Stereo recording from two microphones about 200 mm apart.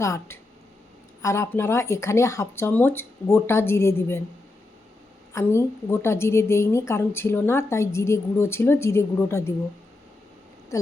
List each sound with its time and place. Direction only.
0.0 s a woman's voice: 15° left (ahead or behind)
5.3 s a woman's voice: 15° left (ahead or behind)